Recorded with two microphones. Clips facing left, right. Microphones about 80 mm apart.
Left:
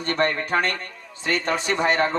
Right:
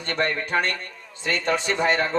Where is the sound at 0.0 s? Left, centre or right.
Left.